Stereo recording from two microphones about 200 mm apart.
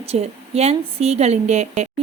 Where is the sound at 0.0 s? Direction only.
30° right (ahead or behind).